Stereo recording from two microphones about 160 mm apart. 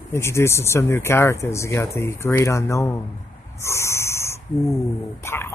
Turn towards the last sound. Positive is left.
turn(degrees=15)  # may be behind; listen again after turning